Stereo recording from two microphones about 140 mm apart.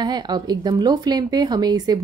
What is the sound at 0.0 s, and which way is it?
A woman's voice, 30° right (ahead or behind).